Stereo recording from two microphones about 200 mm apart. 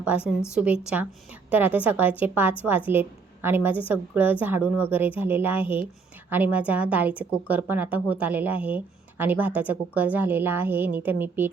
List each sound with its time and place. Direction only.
0.0 s a woman's voice: 5° right (ahead or behind)